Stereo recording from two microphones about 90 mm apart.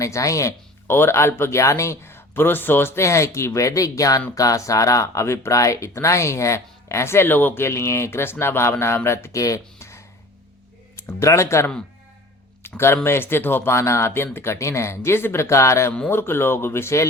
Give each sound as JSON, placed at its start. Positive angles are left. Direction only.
{"t": 0.0, "sound": "speech", "side_deg": 35}
{"t": 11.2, "sound": "speech", "side_deg": 35}
{"t": 15.9, "sound": "speech", "side_deg": 20}